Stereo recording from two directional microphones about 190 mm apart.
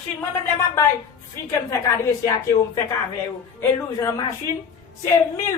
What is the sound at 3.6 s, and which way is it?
Speech, 15° left (ahead or behind).